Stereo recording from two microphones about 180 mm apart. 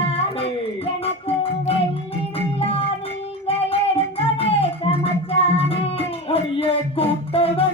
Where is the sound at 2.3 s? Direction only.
35° left (ahead or behind).